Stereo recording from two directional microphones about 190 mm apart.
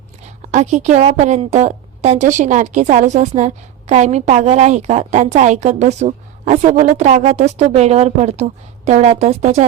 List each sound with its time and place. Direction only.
0.5 s a woman's voice: 40° right (ahead or behind)